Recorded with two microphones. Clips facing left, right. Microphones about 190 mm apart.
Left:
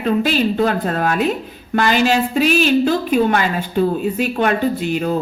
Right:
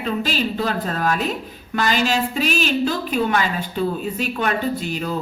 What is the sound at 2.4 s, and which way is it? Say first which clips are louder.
Music: left 6 dB; 45° right (ahead or behind).